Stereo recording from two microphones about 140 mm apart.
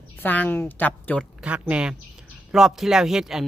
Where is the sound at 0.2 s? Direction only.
10° left (ahead or behind).